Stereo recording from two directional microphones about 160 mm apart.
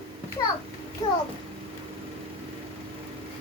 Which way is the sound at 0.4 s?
30° left (ahead or behind).